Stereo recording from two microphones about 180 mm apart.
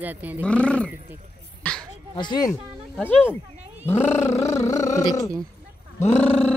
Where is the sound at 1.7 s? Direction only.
10° left (ahead or behind).